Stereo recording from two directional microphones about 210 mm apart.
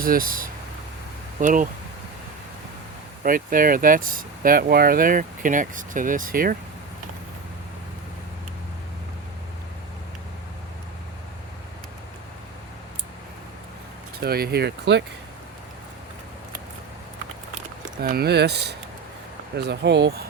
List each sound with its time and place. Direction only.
0.0 s speech: 40° right (ahead or behind)
3.2 s speech: 40° right (ahead or behind)
14.2 s speech: 45° right (ahead or behind)
17.8 s speech: 40° right (ahead or behind)